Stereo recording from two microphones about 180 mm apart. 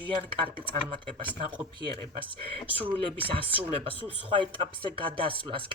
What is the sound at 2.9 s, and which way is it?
Speech, 30° right (ahead or behind).